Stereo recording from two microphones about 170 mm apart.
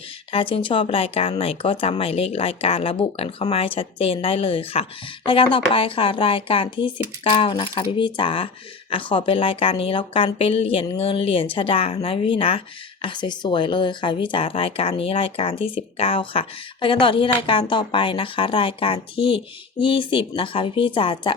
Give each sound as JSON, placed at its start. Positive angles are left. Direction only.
{"t": 0.3, "sound": "speech", "side_deg": 30}